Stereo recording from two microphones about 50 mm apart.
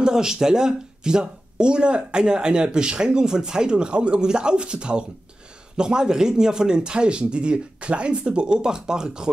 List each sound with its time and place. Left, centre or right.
0.0 s speech: centre